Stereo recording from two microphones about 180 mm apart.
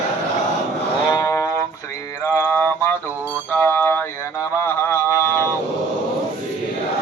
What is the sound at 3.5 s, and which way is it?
Music, 10° left (ahead or behind).